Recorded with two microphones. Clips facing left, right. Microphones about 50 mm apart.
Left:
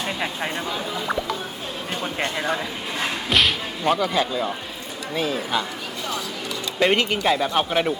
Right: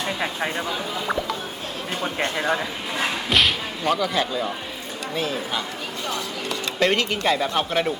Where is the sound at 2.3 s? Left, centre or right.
Centre.